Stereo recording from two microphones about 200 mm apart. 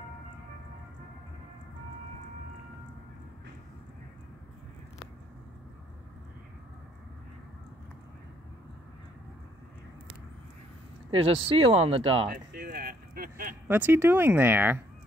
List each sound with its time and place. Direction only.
11.1 s speech: 30° right (ahead or behind)
12.3 s a sound: 50° right (ahead or behind)
13.7 s speech: 10° right (ahead or behind)